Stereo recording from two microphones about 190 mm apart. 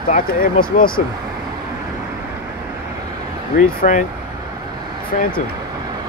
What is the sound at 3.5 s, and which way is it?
Speech, 45° left (ahead or behind).